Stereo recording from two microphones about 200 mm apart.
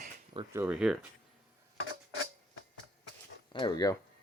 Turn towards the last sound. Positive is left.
turn(degrees=20)  # may be behind; listen again after turning